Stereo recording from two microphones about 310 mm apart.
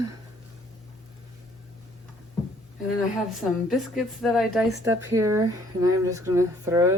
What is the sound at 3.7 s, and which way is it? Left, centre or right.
Speech, centre.